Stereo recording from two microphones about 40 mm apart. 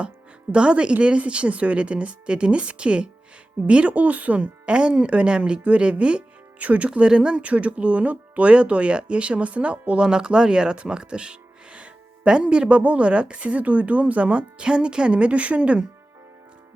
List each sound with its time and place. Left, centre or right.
0.5 s speech: right
4.6 s speech: right
7.4 s speech: right
10.0 s speech: centre